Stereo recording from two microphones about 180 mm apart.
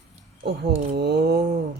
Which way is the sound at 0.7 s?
70° right (ahead or behind).